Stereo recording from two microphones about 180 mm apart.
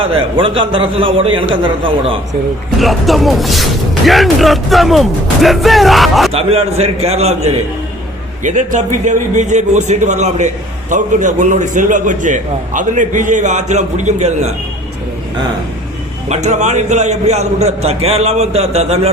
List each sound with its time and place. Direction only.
0.0 s a man's voice: 30° right (ahead or behind)
2.7 s speech: centre (ahead or behind)
6.3 s a man's voice: 35° right (ahead or behind)
16.3 s a man's voice: 40° right (ahead or behind)